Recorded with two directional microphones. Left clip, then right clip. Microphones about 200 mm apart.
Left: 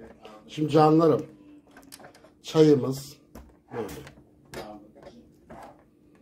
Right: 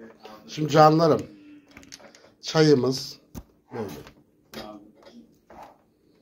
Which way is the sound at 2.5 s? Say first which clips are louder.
Even; 10° right (ahead or behind).